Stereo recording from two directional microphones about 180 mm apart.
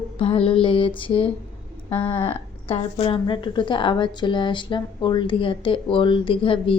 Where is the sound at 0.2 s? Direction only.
30° left (ahead or behind).